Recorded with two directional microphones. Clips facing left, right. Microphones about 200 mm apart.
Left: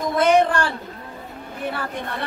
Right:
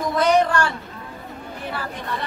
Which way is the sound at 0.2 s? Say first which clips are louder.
Left 1 dB; 25° left (ahead or behind).